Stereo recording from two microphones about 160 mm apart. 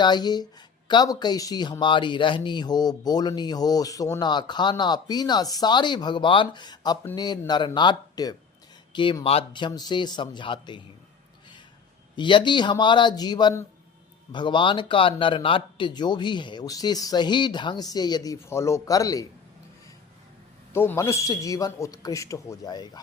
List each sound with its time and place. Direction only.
0.0 s speech: 25° left (ahead or behind)
12.1 s speech: 30° left (ahead or behind)
20.7 s speech: 15° left (ahead or behind)